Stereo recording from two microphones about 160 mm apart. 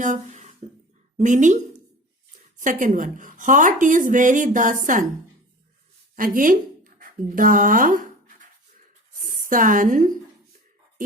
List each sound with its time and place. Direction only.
0.0 s a sound: 50° right (ahead or behind)
1.2 s a woman's voice: 50° right (ahead or behind)
2.6 s a woman's voice: 55° right (ahead or behind)
6.1 s speech: 60° right (ahead or behind)
7.0 s scratch: 60° right (ahead or behind)
9.2 s a woman's voice: 55° right (ahead or behind)